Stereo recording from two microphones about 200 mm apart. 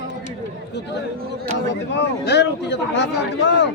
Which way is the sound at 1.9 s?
60° left (ahead or behind).